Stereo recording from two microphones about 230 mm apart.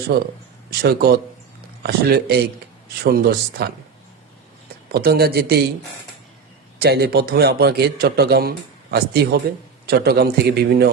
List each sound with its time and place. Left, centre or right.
0.1 s a man's voice: right
4.9 s a man's voice: right
6.8 s a man's voice: right